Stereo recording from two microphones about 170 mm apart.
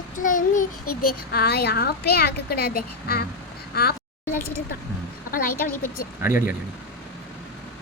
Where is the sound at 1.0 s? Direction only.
65° left (ahead or behind).